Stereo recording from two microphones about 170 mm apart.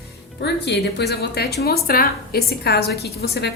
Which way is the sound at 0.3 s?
80° left.